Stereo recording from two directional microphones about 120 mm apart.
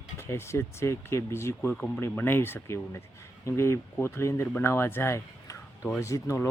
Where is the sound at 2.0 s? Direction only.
20° left (ahead or behind).